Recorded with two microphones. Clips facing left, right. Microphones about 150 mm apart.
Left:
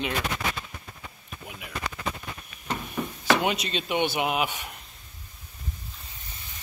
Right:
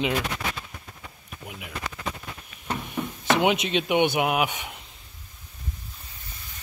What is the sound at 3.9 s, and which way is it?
Speech, 15° right (ahead or behind).